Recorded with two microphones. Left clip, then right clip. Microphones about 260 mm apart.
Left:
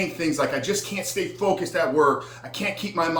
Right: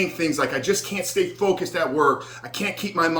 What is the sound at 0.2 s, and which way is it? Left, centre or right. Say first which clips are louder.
A man's voice: right 1 dB; centre.